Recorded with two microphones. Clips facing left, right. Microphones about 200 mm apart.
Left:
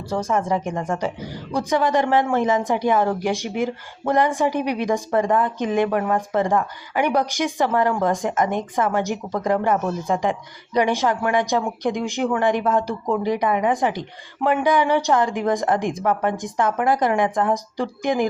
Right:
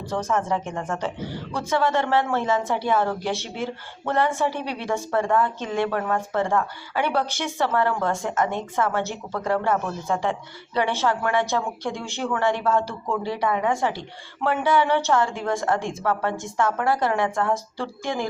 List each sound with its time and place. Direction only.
0.0 s a woman's voice: 10° left (ahead or behind)